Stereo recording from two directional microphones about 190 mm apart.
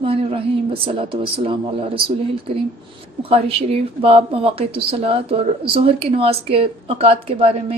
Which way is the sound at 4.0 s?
30° right (ahead or behind).